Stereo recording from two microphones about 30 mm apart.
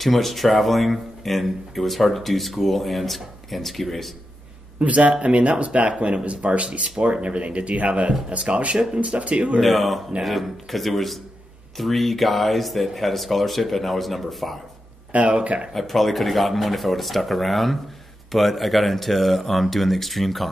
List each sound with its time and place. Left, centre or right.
0.0 s speech: centre
4.7 s speech: right
6.4 s speech: right
9.6 s speech: centre
15.1 s speech: right
15.7 s speech: centre